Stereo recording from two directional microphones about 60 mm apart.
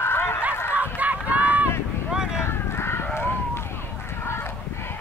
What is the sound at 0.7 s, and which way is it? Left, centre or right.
Run, right.